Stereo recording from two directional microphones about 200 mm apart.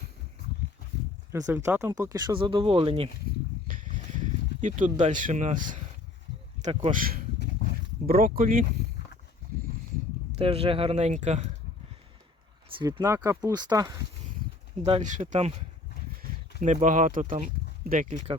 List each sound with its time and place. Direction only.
1.3 s speech: 15° right (ahead or behind)
3.7 s a sound: 40° right (ahead or behind)
6.6 s speech: 30° right (ahead or behind)
6.9 s speech: 45° right (ahead or behind)
10.3 s speech: 30° right (ahead or behind)
12.6 s speech: 20° right (ahead or behind)
14.8 s speech: 35° right (ahead or behind)
16.6 s speech: 40° right (ahead or behind)